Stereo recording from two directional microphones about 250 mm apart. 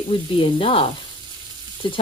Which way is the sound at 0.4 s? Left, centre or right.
Left.